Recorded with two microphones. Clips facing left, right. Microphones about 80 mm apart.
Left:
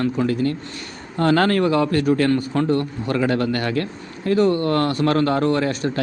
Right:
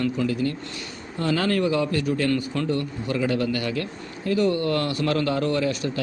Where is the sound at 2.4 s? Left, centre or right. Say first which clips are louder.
Left 5 dB; left.